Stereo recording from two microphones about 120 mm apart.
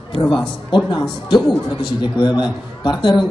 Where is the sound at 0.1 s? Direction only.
45° left (ahead or behind).